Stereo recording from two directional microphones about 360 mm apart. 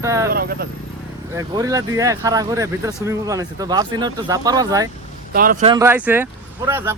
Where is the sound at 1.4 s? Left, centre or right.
Centre.